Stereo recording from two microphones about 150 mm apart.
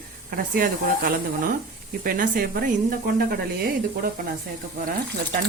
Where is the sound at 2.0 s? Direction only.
70° right (ahead or behind).